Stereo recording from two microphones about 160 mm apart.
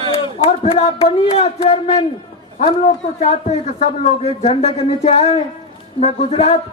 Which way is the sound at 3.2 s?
45° left (ahead or behind).